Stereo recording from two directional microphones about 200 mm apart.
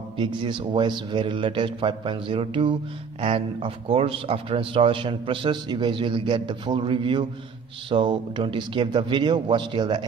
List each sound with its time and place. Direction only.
0.2 s a man's voice: 25° right (ahead or behind)